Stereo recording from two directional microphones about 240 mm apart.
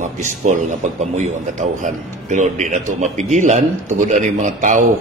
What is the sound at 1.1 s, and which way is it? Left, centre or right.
A man's voice, right.